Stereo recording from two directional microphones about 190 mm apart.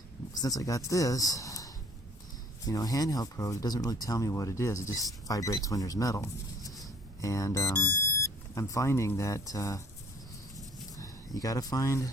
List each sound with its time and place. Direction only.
0.4 s speech: 20° left (ahead or behind)
10.9 s speech: 20° left (ahead or behind)